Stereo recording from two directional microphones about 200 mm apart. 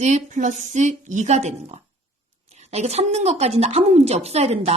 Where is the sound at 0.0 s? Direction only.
35° right (ahead or behind).